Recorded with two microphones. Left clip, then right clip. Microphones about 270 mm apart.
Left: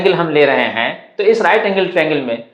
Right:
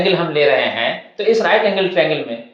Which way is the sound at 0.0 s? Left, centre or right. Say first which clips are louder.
Left 3 dB; left.